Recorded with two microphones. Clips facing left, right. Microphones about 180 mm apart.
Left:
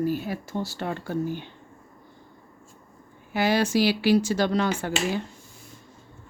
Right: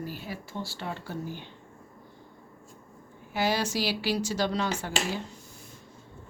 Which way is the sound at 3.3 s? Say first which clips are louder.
Left 6 dB; 55° left (ahead or behind).